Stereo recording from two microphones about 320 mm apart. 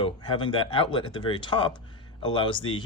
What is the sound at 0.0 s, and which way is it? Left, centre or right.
Speech, centre.